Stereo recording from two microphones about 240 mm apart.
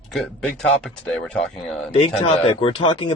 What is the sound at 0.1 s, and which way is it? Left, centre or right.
Speech, centre.